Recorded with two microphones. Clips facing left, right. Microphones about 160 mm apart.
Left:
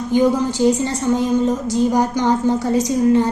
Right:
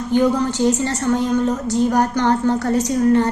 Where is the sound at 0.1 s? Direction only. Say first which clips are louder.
Left 1 dB; 10° left (ahead or behind).